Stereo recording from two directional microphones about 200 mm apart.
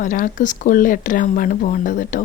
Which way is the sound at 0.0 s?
40° left (ahead or behind).